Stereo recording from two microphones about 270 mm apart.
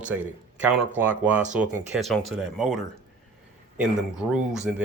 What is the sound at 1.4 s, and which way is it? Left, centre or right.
Speech, right.